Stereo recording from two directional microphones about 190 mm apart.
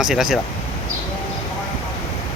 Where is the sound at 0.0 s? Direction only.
Centre (ahead or behind).